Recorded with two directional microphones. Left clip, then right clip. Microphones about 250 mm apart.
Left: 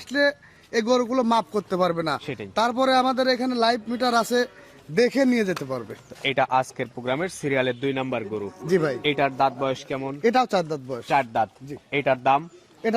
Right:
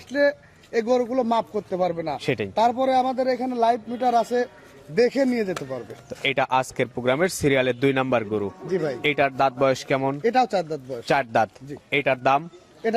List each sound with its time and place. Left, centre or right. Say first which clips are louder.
0.1 s a man's voice: right 1 dB; left
2.2 s speech: right 8 dB; centre
2.6 s a man's voice: even; left
6.1 s speech: even; centre
8.6 s a man's voice: left 7 dB; left
9.0 s speech: right 1 dB; centre
10.2 s a man's voice: left 2 dB; left
11.1 s speech: right 1 dB; centre